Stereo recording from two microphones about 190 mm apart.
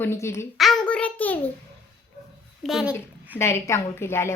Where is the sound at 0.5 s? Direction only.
Centre (ahead or behind).